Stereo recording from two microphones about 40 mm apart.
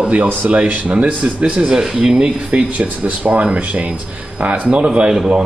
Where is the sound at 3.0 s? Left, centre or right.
Right.